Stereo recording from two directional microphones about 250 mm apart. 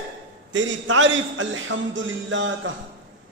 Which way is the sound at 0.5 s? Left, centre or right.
Right.